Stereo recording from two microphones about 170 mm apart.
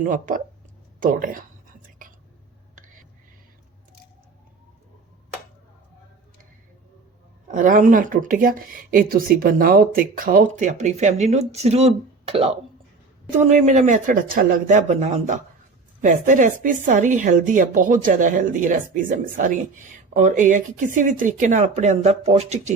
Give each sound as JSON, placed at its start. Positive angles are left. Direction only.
{"t": 0.0, "sound": "speech", "side_deg": -50}
{"t": 7.5, "sound": "speech", "side_deg": -50}